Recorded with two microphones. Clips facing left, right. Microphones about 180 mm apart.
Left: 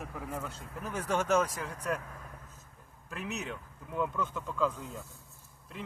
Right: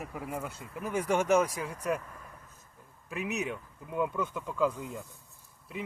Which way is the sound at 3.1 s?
10° right (ahead or behind).